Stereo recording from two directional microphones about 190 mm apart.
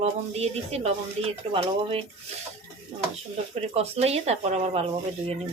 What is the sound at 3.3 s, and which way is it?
Speech, 35° right (ahead or behind).